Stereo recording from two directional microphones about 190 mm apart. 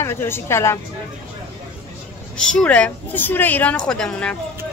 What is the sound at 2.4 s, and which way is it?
A woman's voice, 5° left (ahead or behind).